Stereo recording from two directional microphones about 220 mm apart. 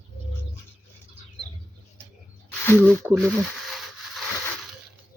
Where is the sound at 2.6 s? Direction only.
10° left (ahead or behind).